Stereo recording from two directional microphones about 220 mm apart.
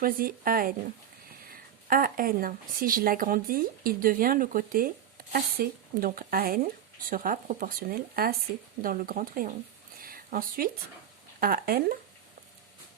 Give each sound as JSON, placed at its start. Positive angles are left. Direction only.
{"t": 0.0, "sound": "speech", "side_deg": -40}
{"t": 10.0, "sound": "a sound", "side_deg": -40}
{"t": 11.3, "sound": "speech", "side_deg": -40}